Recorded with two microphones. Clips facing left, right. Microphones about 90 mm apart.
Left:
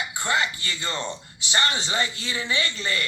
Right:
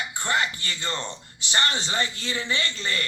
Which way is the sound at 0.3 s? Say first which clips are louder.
Even; 50° right (ahead or behind).